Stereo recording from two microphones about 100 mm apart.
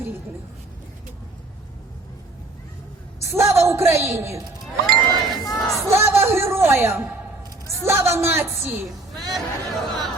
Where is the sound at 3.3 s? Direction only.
25° right (ahead or behind).